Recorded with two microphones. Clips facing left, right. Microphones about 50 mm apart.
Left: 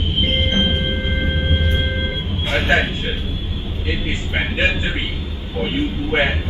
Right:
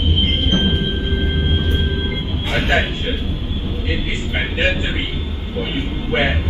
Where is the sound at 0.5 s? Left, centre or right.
Left.